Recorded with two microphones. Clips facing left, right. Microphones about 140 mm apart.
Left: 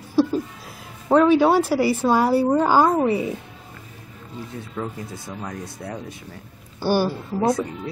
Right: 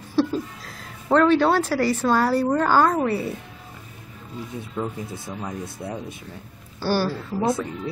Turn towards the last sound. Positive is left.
turn(degrees=20)  # may be behind; listen again after turning